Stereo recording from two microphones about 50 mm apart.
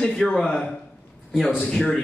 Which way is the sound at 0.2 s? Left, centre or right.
Centre.